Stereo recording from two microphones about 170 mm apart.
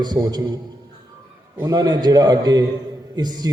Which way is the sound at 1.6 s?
25° right (ahead or behind).